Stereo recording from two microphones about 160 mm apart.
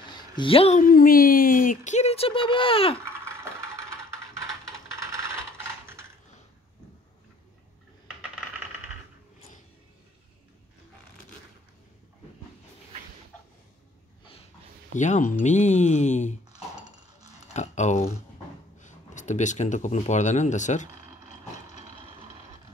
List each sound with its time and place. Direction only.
0.4 s speech: 35° left (ahead or behind)
0.7 s speech: 65° left (ahead or behind); by 3.0 s 35° left (ahead or behind)
5.0 s a sound: 20° right (ahead or behind)
15.0 s speech: 50° left (ahead or behind)
17.6 s a sound: 45° left (ahead or behind)
18.8 s speech: 50° left (ahead or behind)